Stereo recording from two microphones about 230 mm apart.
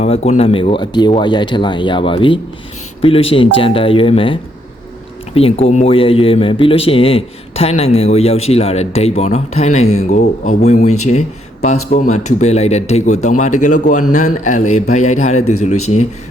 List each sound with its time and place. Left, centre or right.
0.0 s speech: left